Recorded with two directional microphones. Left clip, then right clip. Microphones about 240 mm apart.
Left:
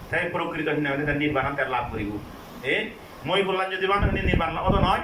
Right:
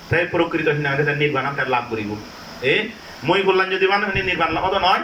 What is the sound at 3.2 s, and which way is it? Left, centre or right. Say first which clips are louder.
A man's voice: right 7 dB; right.